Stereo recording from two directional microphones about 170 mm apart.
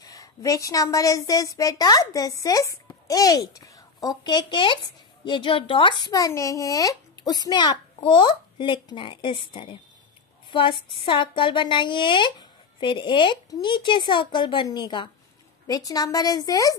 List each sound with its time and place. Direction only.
0.0 s a woman's voice: 20° left (ahead or behind)